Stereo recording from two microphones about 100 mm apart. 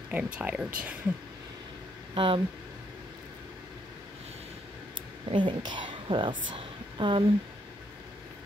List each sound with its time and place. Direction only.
0.1 s speech: 15° right (ahead or behind)
2.1 s speech: 60° right (ahead or behind)
5.3 s a woman's voice: 55° right (ahead or behind)